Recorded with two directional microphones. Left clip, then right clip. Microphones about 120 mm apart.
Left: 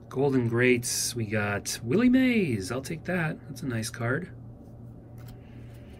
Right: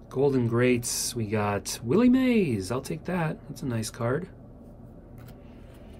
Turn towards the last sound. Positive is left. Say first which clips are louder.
# right 1 dB
turn(degrees=-15)  # may be behind; listen again after turning